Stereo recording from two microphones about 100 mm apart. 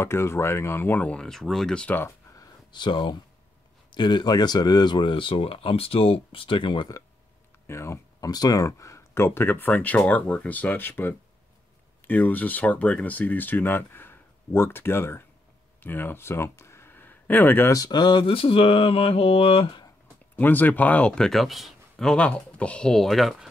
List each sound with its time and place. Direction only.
0.0 s speech: 25° left (ahead or behind); by 2.0 s 10° left (ahead or behind)
2.0 s a sound: 25° left (ahead or behind)
2.7 s speech: 50° left (ahead or behind)
7.6 s speech: 25° left (ahead or behind)
8.3 s speech: 40° left (ahead or behind); by 17.7 s 20° left (ahead or behind)
17.7 s speech: 45° left (ahead or behind); by 19.8 s 65° left (ahead or behind)
20.3 s speech: 20° left (ahead or behind); by 23.5 s centre (ahead or behind)